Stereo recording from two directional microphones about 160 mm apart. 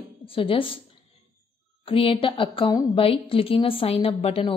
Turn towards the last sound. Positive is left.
turn(degrees=35)  # may be behind; listen again after turning